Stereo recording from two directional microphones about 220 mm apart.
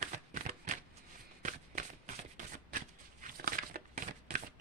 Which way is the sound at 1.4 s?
35° right (ahead or behind).